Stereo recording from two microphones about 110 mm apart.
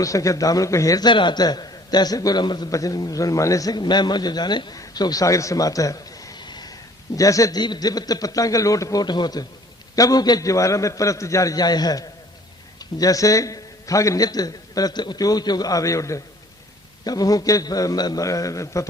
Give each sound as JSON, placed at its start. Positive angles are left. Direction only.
{"t": 0.0, "sound": "a man's voice", "side_deg": 30}
{"t": 4.8, "sound": "a sound", "side_deg": 35}
{"t": 7.2, "sound": "a man's voice", "side_deg": 30}